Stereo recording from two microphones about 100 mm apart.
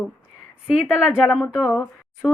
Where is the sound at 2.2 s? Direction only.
10° left (ahead or behind).